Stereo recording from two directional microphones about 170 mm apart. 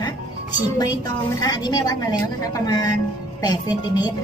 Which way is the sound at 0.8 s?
20° left (ahead or behind).